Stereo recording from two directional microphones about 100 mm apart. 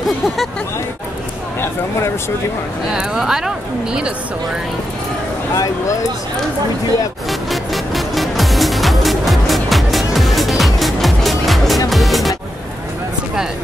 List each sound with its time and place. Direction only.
1.6 s speech: 30° left (ahead or behind)
2.9 s a woman's voice: 5° right (ahead or behind)
5.5 s speech: 30° left (ahead or behind)
7.2 s music: centre (ahead or behind)